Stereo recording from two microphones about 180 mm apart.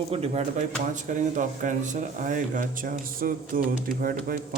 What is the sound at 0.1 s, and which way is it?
Speech, 35° right (ahead or behind).